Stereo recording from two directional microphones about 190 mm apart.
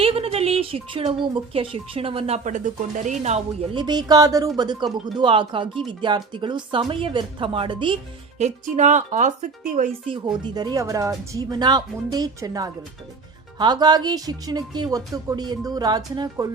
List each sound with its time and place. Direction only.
0.0 s speech: 30° right (ahead or behind)
3.8 s speech: 20° right (ahead or behind)
8.4 s speech: 40° right (ahead or behind)
10.1 s speech: 20° right (ahead or behind)